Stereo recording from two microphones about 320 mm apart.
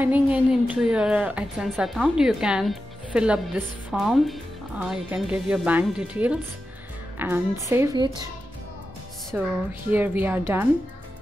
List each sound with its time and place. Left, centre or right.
0.0 s a woman's voice: centre
9.3 s a woman's voice: centre